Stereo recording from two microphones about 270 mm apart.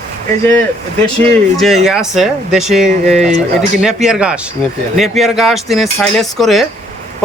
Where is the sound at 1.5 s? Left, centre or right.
Centre.